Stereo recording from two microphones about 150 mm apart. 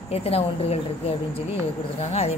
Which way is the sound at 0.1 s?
40° left (ahead or behind).